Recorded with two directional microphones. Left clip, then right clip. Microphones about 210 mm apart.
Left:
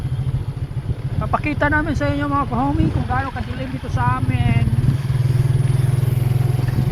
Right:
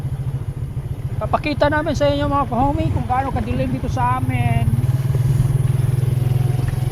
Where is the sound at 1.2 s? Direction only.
15° right (ahead or behind).